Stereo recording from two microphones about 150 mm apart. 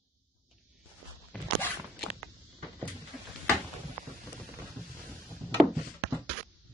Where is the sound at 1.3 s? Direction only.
5° left (ahead or behind).